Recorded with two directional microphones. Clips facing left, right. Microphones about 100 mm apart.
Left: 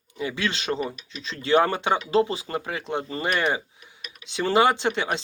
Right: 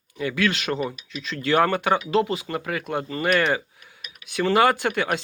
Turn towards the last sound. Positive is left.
turn(degrees=25)  # may be behind; listen again after turning